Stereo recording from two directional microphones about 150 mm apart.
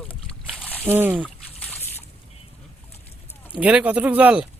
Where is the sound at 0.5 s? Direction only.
10° left (ahead or behind).